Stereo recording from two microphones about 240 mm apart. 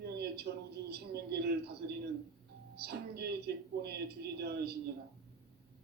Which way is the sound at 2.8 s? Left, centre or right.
Right.